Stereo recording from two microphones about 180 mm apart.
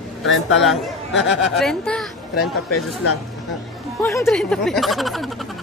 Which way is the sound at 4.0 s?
15° left (ahead or behind).